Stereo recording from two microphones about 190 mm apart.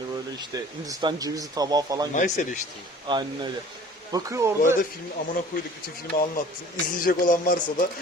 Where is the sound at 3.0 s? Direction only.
25° right (ahead or behind).